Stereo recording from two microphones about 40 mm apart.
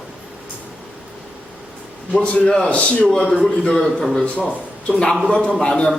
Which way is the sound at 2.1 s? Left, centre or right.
Left.